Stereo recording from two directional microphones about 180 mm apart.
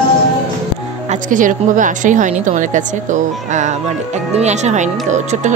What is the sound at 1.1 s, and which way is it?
Speech, 45° right (ahead or behind).